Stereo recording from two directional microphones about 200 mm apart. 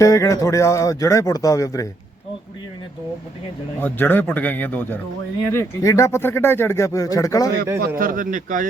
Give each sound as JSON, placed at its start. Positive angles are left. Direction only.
{"t": 0.0, "sound": "speech", "side_deg": 15}
{"t": 3.8, "sound": "speech", "side_deg": 10}
{"t": 7.8, "sound": "speech", "side_deg": -45}